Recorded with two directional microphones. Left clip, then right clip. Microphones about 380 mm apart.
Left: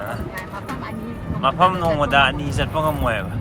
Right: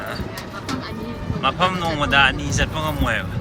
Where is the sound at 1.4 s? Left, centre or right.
Centre.